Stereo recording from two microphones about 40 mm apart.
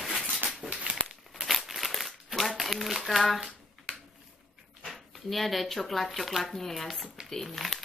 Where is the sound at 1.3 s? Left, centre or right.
Centre.